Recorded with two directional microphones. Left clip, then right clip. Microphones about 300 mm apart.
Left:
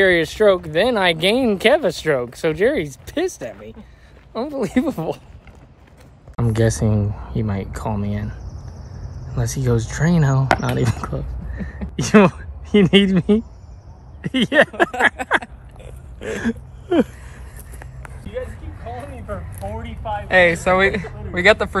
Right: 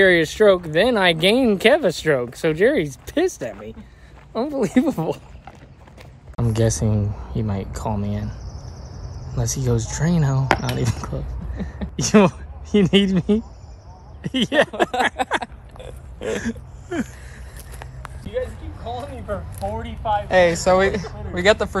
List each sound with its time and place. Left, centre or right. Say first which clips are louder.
0.0 s speech: even; centre
6.3 s speech: left 2 dB; centre
15.4 s a sound: right 4 dB; right
16.3 s speech: left 3 dB; centre
18.2 s a sound: right 3 dB; right
20.2 s speech: left 2 dB; centre